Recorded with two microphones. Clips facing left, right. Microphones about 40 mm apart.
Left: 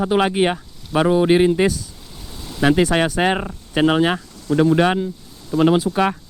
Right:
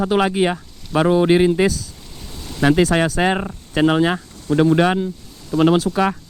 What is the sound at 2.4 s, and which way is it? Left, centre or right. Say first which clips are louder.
Boat: right 1 dB; centre.